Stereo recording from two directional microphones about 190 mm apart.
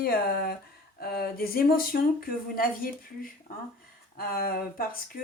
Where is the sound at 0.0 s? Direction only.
55° left (ahead or behind).